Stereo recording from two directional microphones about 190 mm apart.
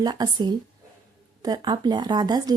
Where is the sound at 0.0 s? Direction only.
20° right (ahead or behind).